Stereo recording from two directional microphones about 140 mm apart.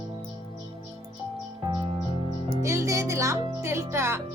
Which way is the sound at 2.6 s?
20° right (ahead or behind).